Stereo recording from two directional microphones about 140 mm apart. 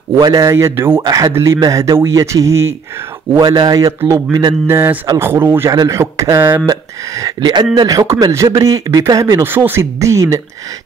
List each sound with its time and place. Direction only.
0.2 s speech: 25° right (ahead or behind)
4.6 s speech: 15° right (ahead or behind)